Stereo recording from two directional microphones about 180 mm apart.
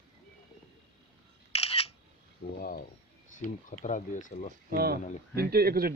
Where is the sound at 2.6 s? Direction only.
55° left (ahead or behind).